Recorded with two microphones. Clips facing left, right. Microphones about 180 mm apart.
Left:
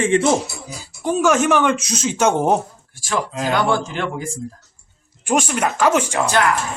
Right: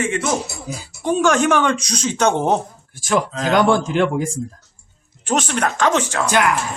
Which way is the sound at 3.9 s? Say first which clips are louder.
Right 7 dB; 55° right (ahead or behind).